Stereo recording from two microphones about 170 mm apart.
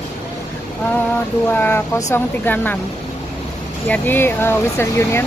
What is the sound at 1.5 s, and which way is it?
Speech, 10° left (ahead or behind).